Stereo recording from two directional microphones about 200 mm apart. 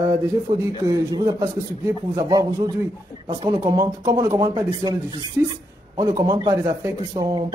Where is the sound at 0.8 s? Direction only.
20° right (ahead or behind).